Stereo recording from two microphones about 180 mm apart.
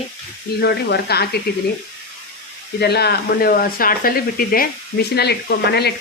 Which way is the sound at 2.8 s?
65° left (ahead or behind).